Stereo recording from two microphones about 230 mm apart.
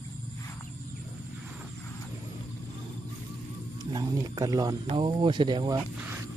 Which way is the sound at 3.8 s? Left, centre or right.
Centre.